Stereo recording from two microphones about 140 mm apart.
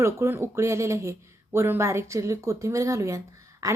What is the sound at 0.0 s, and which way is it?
A woman's voice, 20° right (ahead or behind).